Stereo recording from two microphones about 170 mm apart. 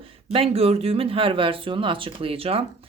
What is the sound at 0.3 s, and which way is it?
Speech, 35° right (ahead or behind).